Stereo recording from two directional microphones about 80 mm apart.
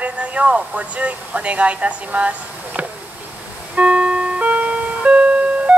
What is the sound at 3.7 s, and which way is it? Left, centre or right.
Music, centre.